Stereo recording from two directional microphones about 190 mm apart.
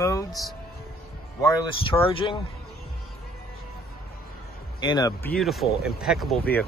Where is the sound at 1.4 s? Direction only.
25° left (ahead or behind).